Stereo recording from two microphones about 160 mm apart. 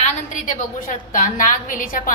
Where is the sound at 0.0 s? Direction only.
50° left (ahead or behind).